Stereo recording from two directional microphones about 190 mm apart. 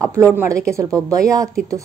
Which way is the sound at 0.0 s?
15° right (ahead or behind).